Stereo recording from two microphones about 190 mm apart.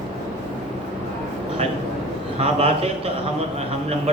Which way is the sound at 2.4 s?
30° right (ahead or behind).